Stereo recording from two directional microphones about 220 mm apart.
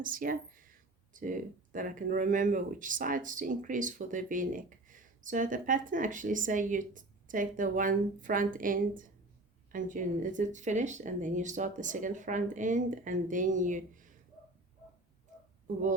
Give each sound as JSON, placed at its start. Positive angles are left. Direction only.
{"t": 0.0, "sound": "speech", "side_deg": -40}